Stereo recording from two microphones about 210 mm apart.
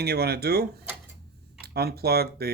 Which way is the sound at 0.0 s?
50° right (ahead or behind).